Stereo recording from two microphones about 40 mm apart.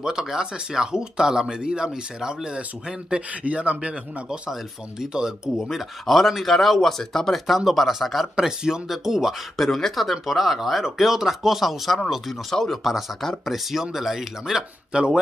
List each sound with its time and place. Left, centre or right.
0.0 s speech: centre
3.4 s speech: right
5.6 s speech: centre
7.4 s speech: centre
8.4 s speech: centre
9.6 s speech: centre
13.5 s speech: centre
14.9 s speech: right